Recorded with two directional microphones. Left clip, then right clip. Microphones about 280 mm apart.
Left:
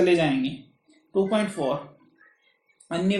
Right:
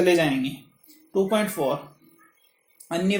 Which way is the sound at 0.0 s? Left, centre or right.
Right.